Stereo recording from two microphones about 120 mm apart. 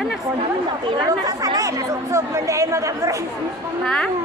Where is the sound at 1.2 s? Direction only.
30° right (ahead or behind).